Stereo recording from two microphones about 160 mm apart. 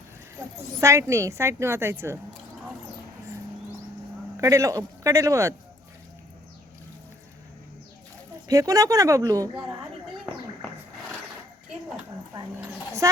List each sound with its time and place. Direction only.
0.3 s a woman's voice: 20° right (ahead or behind)
4.4 s a man's voice: 20° right (ahead or behind)
8.4 s a man's voice: 20° right (ahead or behind)
12.3 s a sound: 20° right (ahead or behind)